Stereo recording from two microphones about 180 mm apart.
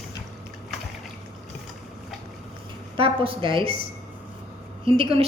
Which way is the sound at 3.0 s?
30° right (ahead or behind).